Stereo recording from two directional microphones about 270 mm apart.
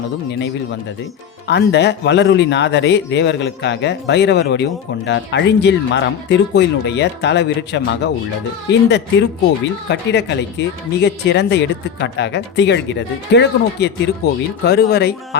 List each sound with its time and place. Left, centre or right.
1.5 s speech: left